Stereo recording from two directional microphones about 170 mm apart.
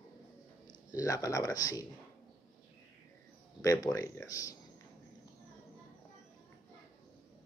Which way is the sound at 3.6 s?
20° left (ahead or behind).